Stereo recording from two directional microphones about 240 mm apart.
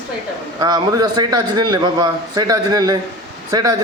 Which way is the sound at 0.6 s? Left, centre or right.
Centre.